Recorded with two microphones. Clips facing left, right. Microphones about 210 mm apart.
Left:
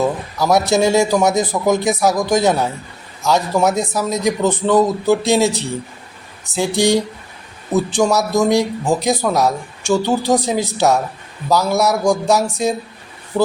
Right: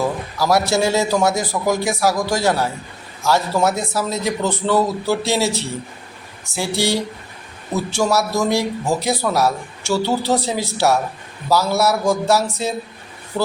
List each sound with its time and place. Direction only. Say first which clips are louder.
0.0 s a man's voice: left 3 dB; 20° left (ahead or behind)
13.3 s speech: left 5 dB; centre (ahead or behind)